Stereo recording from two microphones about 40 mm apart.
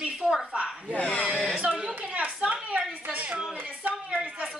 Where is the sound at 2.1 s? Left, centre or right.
Right.